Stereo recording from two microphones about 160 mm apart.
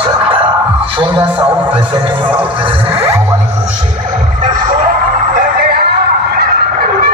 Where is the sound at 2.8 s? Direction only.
15° right (ahead or behind).